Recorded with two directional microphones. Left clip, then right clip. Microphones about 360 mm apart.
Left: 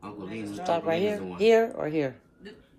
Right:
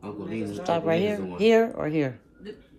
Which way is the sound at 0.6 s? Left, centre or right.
Centre.